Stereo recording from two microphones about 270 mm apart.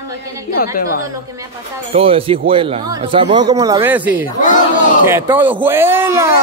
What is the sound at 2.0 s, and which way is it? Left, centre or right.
A man's voice, right.